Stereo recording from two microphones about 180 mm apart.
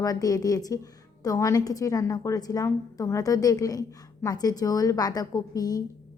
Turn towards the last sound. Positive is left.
turn(degrees=20)  # may be behind; listen again after turning